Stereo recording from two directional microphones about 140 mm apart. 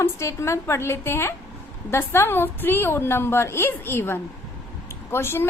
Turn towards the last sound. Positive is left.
turn(degrees=15)  # may be behind; listen again after turning